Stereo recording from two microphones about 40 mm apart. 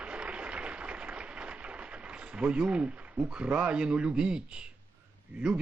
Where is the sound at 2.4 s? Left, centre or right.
Right.